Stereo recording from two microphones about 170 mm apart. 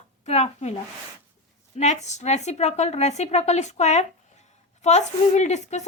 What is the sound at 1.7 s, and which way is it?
Speech, 40° left (ahead or behind).